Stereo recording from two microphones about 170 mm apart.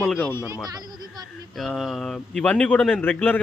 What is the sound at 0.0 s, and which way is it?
Speech, 5° left (ahead or behind).